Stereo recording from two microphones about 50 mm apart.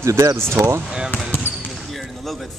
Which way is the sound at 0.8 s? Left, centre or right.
Centre.